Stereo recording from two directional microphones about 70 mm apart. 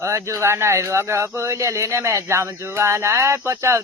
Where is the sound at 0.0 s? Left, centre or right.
Right.